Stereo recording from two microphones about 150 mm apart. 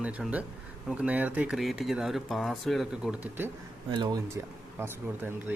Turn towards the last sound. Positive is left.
turn(degrees=-15)  # may be behind; listen again after turning